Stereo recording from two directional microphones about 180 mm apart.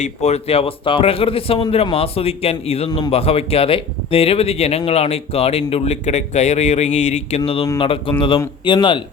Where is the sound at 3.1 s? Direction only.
35° left (ahead or behind).